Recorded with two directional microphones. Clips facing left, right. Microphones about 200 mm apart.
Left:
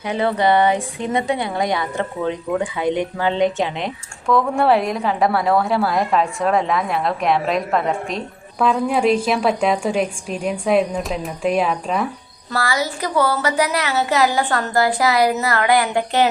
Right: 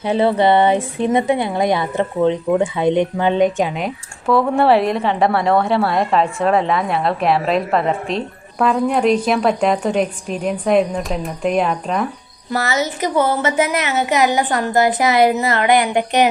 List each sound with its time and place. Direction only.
0.2 s a woman's voice: 25° right (ahead or behind); by 12.0 s centre (ahead or behind)
12.5 s a woman's voice: 20° right (ahead or behind)